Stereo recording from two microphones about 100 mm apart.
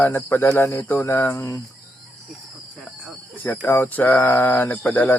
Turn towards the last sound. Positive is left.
turn(degrees=15)  # may be behind; listen again after turning